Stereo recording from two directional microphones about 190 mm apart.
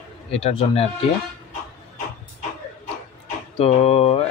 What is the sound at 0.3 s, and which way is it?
Speech, 30° left (ahead or behind).